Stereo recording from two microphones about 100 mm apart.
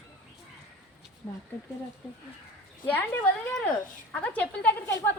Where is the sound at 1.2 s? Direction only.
15° left (ahead or behind).